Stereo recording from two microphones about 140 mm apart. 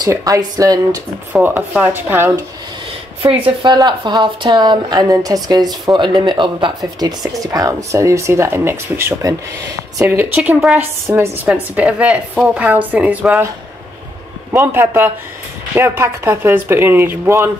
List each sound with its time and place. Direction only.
0.0 s speech: 25° right (ahead or behind)
1.3 s a woman's voice: 10° right (ahead or behind)
3.4 s a woman's voice: 30° right (ahead or behind); by 13.5 s 10° right (ahead or behind)
14.5 s a woman's voice: 20° right (ahead or behind)